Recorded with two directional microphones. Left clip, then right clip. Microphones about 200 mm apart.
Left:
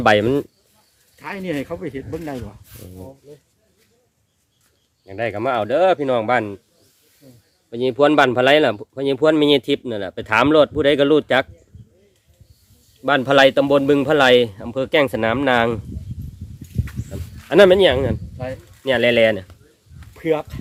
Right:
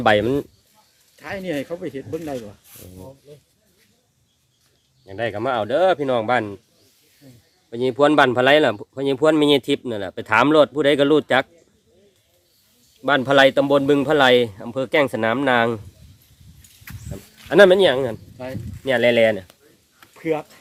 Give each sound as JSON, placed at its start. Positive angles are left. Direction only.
{"t": 0.0, "sound": "speech", "side_deg": 15}
{"t": 1.2, "sound": "speech", "side_deg": 55}
{"t": 2.3, "sound": "speech", "side_deg": 25}
{"t": 5.0, "sound": "speech", "side_deg": 10}
{"t": 7.7, "sound": "speech", "side_deg": 5}
{"t": 13.0, "sound": "speech", "side_deg": 5}
{"t": 17.4, "sound": "speech", "side_deg": 10}
{"t": 18.4, "sound": "speech", "side_deg": 60}
{"t": 18.9, "sound": "speech", "side_deg": 15}
{"t": 20.1, "sound": "speech", "side_deg": 35}